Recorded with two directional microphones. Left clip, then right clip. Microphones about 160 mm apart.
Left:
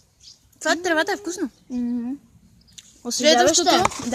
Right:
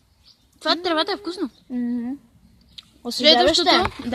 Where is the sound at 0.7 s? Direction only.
15° left (ahead or behind).